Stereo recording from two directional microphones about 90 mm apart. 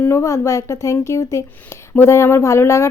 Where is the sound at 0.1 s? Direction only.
35° left (ahead or behind).